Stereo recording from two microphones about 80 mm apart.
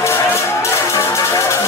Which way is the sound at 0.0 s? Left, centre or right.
Left.